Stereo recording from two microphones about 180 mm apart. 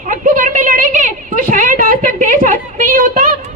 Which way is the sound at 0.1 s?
45° right (ahead or behind).